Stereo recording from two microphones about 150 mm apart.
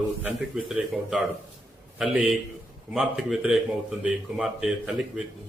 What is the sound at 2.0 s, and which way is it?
A man's voice, 5° right (ahead or behind).